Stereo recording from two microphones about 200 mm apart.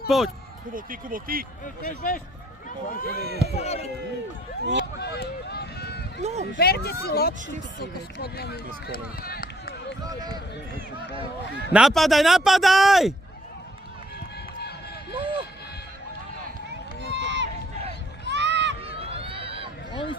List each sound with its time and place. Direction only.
0.1 s a man's voice: centre (ahead or behind)
0.7 s speech: 45° right (ahead or behind)
1.6 s speech: 40° left (ahead or behind)
3.1 s speech: 50° right (ahead or behind)
3.5 s speech: 30° left (ahead or behind)
4.6 s speech: 60° right (ahead or behind)
4.9 s run: 55° left (ahead or behind)
6.2 s speech: 35° right (ahead or behind)
6.6 s speech: 50° left (ahead or behind)
10.0 s speech: 20° right (ahead or behind)
11.7 s a man's voice: centre (ahead or behind)
17.1 s run: 60° right (ahead or behind)
18.9 s run: 30° right (ahead or behind)
19.9 s speech: 25° left (ahead or behind)